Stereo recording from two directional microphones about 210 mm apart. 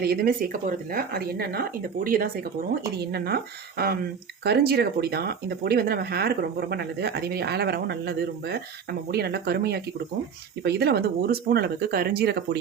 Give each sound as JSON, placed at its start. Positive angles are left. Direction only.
{"t": 0.0, "sound": "speech", "side_deg": -45}